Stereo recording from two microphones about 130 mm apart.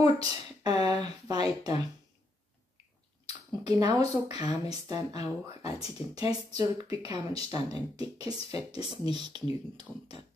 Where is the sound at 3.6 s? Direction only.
30° right (ahead or behind).